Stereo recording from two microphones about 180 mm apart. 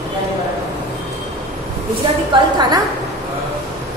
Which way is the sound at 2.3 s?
20° right (ahead or behind).